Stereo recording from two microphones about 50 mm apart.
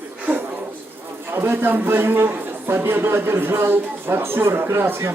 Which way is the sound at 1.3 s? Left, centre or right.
Right.